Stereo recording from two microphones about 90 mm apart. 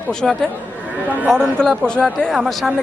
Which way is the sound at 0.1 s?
5° left (ahead or behind).